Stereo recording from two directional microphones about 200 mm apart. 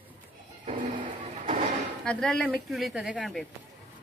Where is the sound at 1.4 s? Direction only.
40° right (ahead or behind).